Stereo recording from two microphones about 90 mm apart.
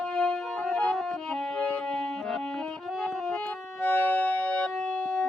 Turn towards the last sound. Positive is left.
turn(degrees=20)  # may be behind; listen again after turning